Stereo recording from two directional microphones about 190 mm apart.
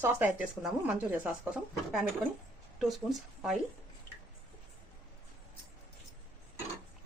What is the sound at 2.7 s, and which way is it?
Speech, centre (ahead or behind).